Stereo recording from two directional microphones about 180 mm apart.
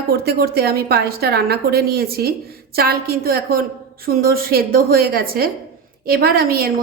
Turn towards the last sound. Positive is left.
turn(degrees=-55)  # may be behind; listen again after turning